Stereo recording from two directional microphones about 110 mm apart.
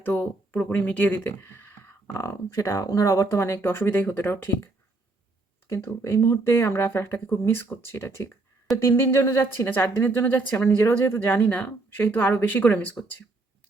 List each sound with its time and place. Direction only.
0.0 s speech: 20° left (ahead or behind)